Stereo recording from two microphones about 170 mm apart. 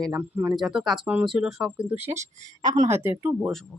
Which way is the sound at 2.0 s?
45° right (ahead or behind).